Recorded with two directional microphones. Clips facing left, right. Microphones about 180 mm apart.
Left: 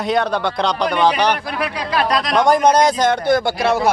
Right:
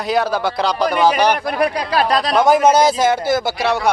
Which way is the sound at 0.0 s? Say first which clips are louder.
Even; centre (ahead or behind).